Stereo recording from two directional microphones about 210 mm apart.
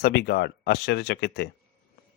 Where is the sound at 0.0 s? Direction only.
50° left (ahead or behind).